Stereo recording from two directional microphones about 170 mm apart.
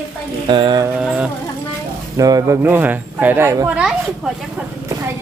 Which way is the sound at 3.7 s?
5° right (ahead or behind).